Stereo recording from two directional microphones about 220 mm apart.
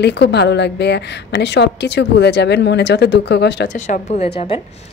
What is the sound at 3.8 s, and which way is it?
Speech, 35° left (ahead or behind).